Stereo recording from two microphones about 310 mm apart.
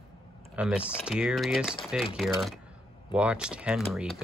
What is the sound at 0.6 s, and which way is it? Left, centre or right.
Speech, centre.